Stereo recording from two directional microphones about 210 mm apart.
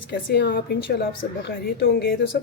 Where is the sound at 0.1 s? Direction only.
50° left (ahead or behind).